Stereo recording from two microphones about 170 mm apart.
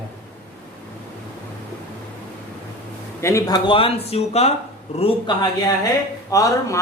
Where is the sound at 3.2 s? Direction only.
20° left (ahead or behind).